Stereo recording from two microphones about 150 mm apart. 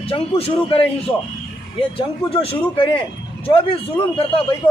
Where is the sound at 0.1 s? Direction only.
40° left (ahead or behind).